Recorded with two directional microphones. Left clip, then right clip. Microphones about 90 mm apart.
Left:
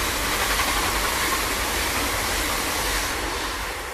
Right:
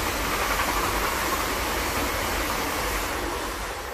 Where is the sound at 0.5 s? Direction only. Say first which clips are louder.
Left 2 dB; 30° left (ahead or behind).